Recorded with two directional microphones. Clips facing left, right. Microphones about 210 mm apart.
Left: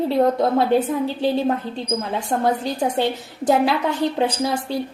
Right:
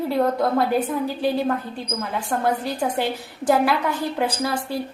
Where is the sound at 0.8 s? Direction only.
25° left (ahead or behind).